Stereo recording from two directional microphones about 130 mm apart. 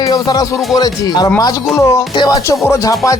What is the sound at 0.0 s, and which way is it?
Speech, 30° left (ahead or behind).